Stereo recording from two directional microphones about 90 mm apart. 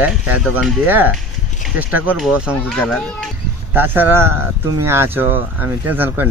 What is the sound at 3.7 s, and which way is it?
Speech, 20° right (ahead or behind).